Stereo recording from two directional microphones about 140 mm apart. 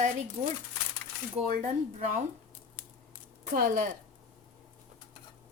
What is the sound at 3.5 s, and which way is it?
Speech, 65° right (ahead or behind).